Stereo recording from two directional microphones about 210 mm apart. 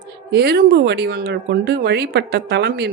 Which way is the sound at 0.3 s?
50° right (ahead or behind).